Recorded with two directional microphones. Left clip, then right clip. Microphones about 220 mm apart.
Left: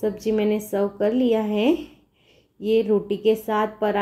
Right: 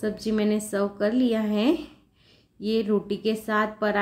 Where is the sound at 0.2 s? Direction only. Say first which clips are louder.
Left 4 dB; 5° right (ahead or behind).